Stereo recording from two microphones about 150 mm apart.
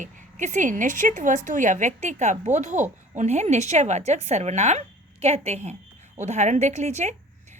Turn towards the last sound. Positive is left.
turn(degrees=-50)  # may be behind; listen again after turning